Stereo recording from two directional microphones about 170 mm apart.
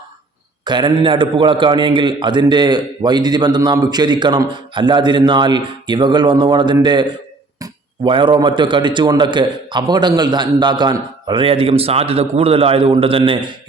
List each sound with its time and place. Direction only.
0.6 s a man's voice: 25° right (ahead or behind)